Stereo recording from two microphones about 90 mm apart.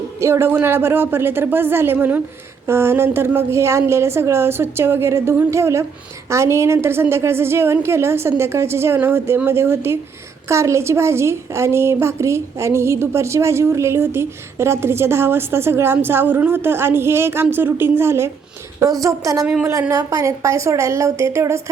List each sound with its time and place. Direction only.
0.2 s a woman's voice: 30° right (ahead or behind)
19.0 s a woman's voice: 40° right (ahead or behind)